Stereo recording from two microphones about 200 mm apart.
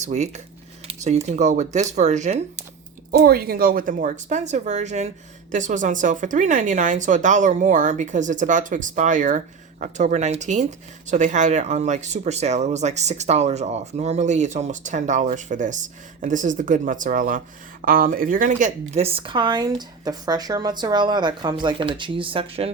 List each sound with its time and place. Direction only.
0.0 s speech: 35° right (ahead or behind)
3.1 s speech: 50° right (ahead or behind); by 22.7 s 30° right (ahead or behind)